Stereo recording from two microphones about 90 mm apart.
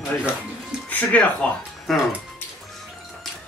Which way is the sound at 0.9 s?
20° left (ahead or behind).